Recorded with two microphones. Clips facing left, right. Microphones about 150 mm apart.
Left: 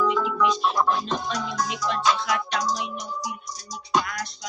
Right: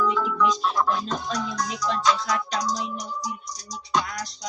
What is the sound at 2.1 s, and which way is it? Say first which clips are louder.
Music: left 1 dB; 40° right (ahead or behind).